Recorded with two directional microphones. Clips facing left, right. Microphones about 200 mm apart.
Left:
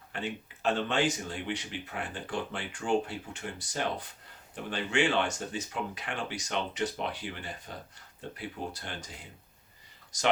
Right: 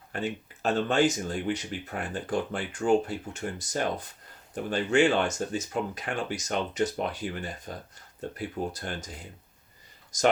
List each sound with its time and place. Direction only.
0.1 s speech: 45° right (ahead or behind)